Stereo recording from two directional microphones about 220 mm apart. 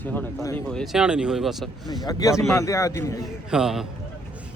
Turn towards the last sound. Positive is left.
turn(degrees=0)  # may be behind; listen again after turning